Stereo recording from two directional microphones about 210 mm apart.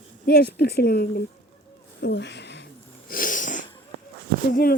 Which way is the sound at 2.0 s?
55° left (ahead or behind).